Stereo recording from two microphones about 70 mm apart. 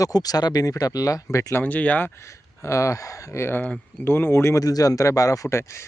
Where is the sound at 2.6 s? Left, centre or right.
Left.